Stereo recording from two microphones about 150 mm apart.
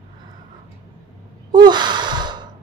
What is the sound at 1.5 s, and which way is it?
Gasp, 30° right (ahead or behind).